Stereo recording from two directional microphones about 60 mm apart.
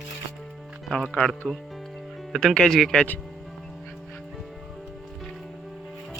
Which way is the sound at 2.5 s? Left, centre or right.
Centre.